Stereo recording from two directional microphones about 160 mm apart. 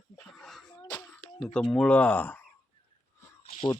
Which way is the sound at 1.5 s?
5° left (ahead or behind).